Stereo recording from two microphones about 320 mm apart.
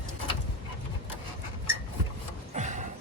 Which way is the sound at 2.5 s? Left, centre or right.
Right.